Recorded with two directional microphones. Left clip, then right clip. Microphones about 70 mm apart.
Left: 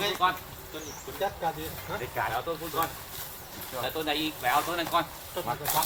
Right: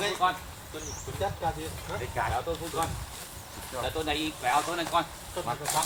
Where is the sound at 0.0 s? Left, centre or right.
Left.